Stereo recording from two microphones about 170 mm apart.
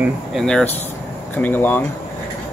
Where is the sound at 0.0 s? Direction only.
Centre (ahead or behind).